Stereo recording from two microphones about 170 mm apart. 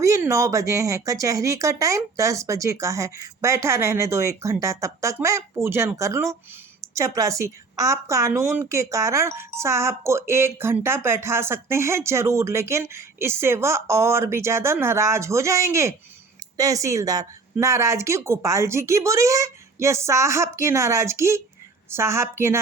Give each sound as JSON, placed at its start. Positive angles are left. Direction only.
{"t": 0.0, "sound": "a woman's voice", "side_deg": -20}